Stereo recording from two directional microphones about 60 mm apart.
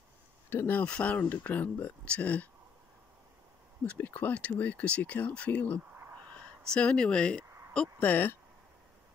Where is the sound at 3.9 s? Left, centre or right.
Left.